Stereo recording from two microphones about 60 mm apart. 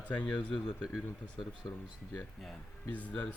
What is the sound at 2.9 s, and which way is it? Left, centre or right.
Speech, left.